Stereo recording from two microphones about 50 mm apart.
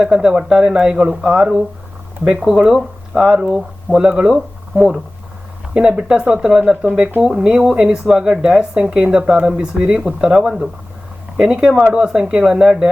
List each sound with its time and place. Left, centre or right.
0.0 s speech: centre
4.4 s speech: centre
5.7 s speech: centre